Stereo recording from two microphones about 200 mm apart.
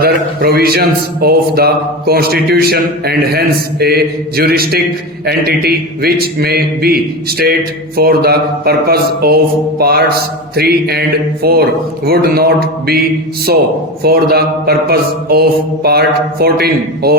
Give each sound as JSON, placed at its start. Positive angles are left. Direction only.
{"t": 0.0, "sound": "a man's voice", "side_deg": -50}
{"t": 14.0, "sound": "a man's voice", "side_deg": -50}